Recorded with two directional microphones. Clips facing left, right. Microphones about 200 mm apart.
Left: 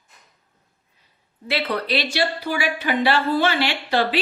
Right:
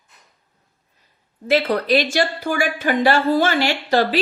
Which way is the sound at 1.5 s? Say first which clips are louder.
Right 6 dB; 45° right (ahead or behind).